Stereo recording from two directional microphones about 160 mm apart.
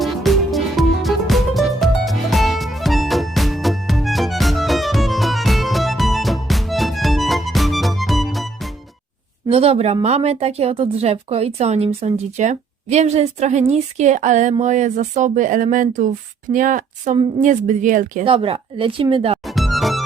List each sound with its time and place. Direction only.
0.0 s music: centre (ahead or behind)
9.5 s speech: 40° right (ahead or behind); by 18.3 s 55° right (ahead or behind)
18.3 s speech: 40° right (ahead or behind)
19.5 s music: centre (ahead or behind)